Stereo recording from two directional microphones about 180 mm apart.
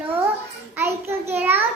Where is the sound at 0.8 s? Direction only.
10° right (ahead or behind).